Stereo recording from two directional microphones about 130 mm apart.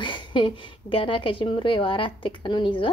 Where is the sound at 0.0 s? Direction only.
40° left (ahead or behind).